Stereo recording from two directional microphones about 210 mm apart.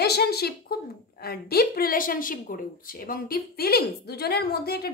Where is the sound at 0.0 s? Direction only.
50° left (ahead or behind).